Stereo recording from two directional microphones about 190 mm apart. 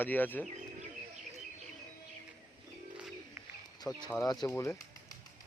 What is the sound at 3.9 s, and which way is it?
Speech, 15° left (ahead or behind).